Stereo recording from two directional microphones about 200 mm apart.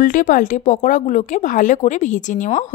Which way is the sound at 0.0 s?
40° left (ahead or behind).